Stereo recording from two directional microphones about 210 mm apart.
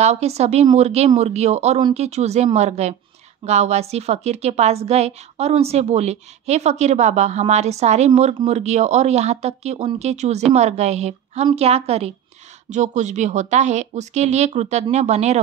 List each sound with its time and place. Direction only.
0.0 s a woman's voice: 30° right (ahead or behind)
1.8 s speech: 20° right (ahead or behind)
2.0 s a woman's voice: 30° right (ahead or behind)